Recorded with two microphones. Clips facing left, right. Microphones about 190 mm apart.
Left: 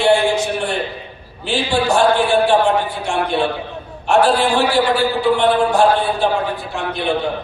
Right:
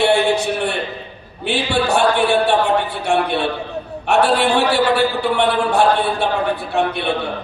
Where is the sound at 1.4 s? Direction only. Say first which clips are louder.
Even; 65° right (ahead or behind).